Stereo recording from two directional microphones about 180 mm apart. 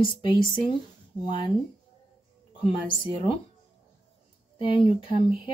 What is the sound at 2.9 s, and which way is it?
Speech, 30° left (ahead or behind).